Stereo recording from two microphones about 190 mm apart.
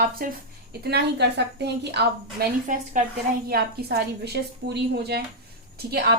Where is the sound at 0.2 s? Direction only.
50° right (ahead or behind).